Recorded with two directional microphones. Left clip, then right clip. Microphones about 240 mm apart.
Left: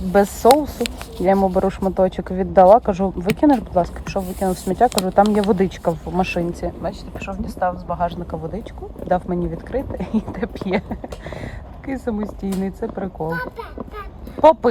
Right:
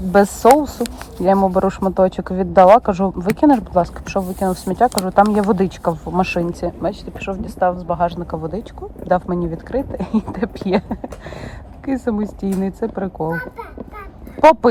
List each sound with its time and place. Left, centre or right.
0.0 s speech: centre